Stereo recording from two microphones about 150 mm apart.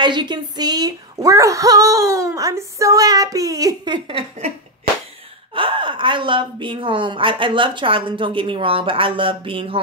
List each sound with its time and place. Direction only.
0.0 s speech: 30° right (ahead or behind)
5.5 s a woman's voice: 35° right (ahead or behind)